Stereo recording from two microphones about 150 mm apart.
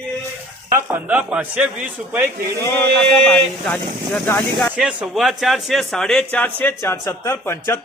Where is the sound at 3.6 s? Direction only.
10° left (ahead or behind).